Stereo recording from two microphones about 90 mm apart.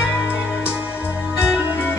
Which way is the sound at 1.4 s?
25° left (ahead or behind).